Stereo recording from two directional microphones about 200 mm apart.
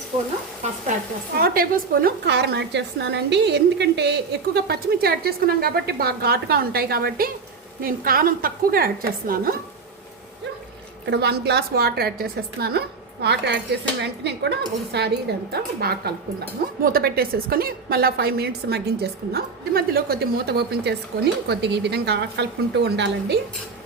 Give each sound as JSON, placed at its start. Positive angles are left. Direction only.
{"t": 1.4, "sound": "a woman's voice", "side_deg": -50}
{"t": 11.0, "sound": "a woman's voice", "side_deg": -55}